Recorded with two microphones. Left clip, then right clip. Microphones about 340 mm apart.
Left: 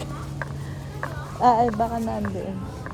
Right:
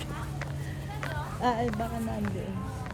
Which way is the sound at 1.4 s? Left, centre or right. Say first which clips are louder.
Left 11 dB; centre.